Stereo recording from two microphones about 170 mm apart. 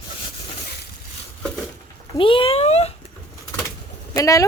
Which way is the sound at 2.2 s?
30° left (ahead or behind).